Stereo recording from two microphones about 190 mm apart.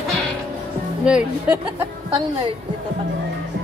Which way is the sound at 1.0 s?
5° right (ahead or behind).